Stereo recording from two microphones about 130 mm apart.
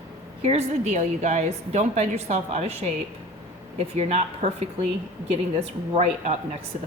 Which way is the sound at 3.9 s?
50° right (ahead or behind).